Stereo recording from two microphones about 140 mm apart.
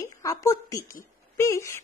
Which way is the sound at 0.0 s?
25° left (ahead or behind).